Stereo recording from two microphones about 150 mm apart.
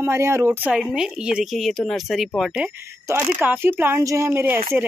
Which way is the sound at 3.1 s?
20° right (ahead or behind).